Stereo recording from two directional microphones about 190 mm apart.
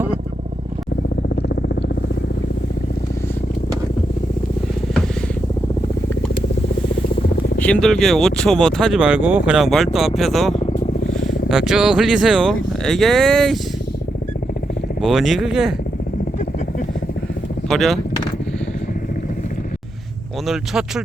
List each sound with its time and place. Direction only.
7.6 s speech: 5° left (ahead or behind)
10.5 s vehicle: 35° left (ahead or behind)
11.4 s speech: centre (ahead or behind)
15.0 s speech: centre (ahead or behind)
17.7 s speech: centre (ahead or behind)
20.5 s speech: 5° right (ahead or behind)